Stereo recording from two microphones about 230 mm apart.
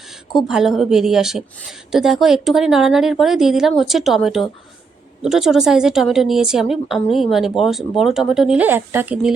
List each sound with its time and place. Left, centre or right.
0.4 s a woman's voice: centre